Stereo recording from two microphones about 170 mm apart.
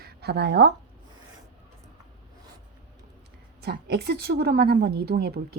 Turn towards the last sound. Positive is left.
turn(degrees=-65)  # may be behind; listen again after turning